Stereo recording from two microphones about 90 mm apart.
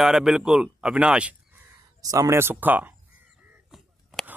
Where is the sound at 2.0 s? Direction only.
35° right (ahead or behind); by 2.9 s 20° right (ahead or behind).